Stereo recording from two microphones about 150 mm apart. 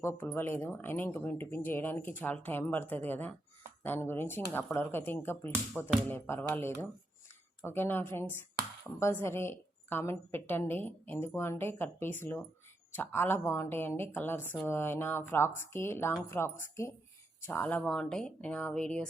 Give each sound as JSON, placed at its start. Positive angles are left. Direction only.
{"t": 0.0, "sound": "speech", "side_deg": 15}